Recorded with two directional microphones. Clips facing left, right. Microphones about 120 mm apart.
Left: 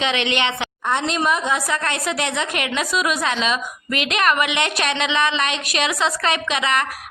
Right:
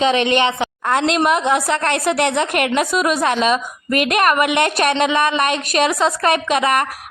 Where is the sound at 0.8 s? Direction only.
70° right (ahead or behind).